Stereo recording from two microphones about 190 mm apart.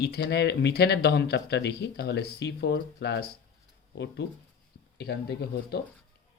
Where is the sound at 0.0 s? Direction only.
60° left (ahead or behind).